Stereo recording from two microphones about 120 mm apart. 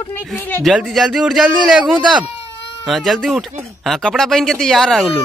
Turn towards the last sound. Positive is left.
turn(degrees=0)  # may be behind; listen again after turning